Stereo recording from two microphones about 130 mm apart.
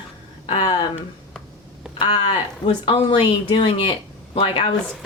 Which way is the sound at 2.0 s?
35° left (ahead or behind).